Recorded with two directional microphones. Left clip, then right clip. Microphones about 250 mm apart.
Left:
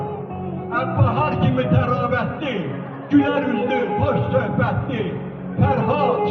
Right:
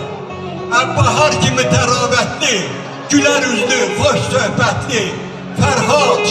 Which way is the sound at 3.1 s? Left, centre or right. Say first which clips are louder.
Right 6 dB; right.